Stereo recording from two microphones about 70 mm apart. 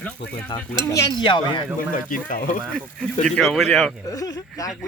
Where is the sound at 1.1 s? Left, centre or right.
Left.